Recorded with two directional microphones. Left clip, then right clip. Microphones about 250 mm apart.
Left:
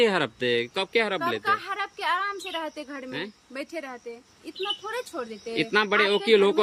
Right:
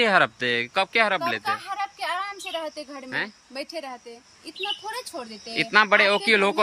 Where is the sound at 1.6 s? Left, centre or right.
Left.